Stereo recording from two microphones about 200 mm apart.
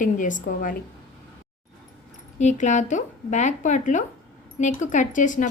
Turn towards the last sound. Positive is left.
turn(degrees=40)  # may be behind; listen again after turning